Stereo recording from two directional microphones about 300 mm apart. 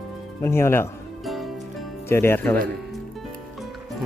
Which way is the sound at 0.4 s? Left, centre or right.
Centre.